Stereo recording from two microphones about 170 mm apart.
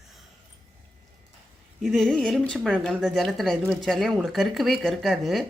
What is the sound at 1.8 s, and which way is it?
Speech, centre (ahead or behind).